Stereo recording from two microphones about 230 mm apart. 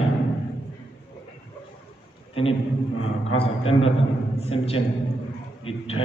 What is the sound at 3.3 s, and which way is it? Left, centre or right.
A man's voice, left.